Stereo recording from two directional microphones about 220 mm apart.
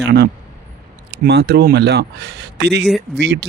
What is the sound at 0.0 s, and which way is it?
Speech, 45° right (ahead or behind).